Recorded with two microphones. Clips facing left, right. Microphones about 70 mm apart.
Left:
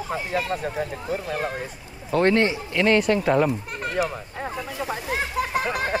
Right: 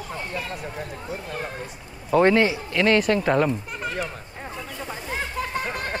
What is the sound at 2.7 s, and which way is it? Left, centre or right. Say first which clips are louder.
Speech: even; left.